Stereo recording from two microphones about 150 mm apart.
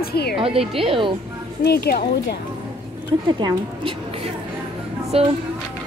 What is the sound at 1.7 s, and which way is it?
Speech, 90° left.